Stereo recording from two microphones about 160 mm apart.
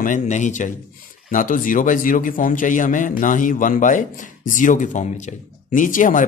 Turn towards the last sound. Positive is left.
turn(degrees=55)  # may be behind; listen again after turning